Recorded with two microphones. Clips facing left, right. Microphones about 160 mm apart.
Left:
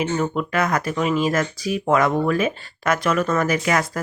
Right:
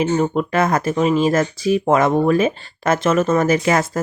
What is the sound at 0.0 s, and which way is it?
Speech, 35° right (ahead or behind).